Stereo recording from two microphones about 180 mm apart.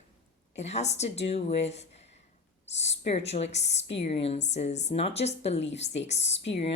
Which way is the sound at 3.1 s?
35° left (ahead or behind).